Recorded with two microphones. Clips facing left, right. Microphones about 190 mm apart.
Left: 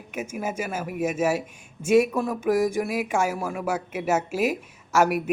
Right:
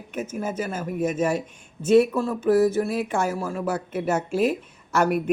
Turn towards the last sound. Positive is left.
turn(degrees=10)  # may be behind; listen again after turning